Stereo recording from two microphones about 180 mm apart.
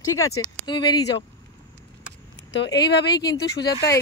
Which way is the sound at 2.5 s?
75° left (ahead or behind).